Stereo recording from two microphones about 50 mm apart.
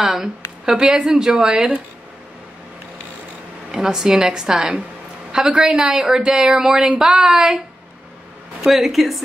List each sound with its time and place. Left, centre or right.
0.7 s a woman's voice: centre
3.7 s a woman's voice: centre
8.6 s a woman's voice: centre